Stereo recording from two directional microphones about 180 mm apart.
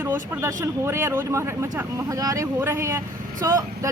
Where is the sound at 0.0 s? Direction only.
15° right (ahead or behind).